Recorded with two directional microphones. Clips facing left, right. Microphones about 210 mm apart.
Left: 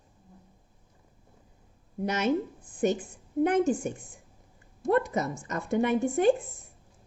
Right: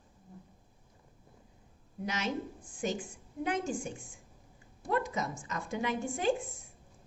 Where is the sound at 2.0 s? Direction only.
55° left (ahead or behind).